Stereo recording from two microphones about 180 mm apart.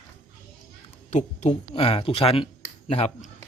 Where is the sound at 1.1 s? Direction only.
40° left (ahead or behind).